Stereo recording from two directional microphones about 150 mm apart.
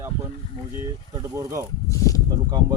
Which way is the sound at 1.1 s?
20° right (ahead or behind).